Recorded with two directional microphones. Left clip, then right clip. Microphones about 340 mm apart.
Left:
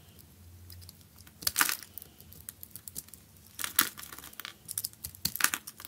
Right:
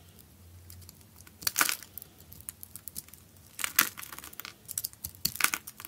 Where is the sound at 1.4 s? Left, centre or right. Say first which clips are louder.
Right 1 dB; centre.